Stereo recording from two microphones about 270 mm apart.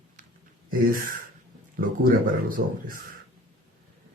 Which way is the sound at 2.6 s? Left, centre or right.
Right.